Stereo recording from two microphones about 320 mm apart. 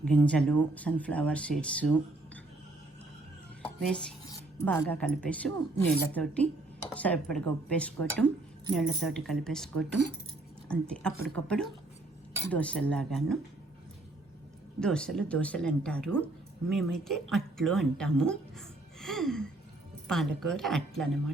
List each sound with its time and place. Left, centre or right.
0.0 s speech: centre
3.6 s cutlery: centre
4.6 s speech: centre
14.8 s speech: centre
18.9 s gasp: centre
20.1 s speech: centre